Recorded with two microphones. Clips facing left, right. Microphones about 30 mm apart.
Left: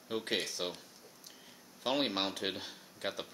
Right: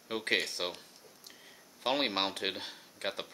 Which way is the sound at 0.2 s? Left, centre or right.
Right.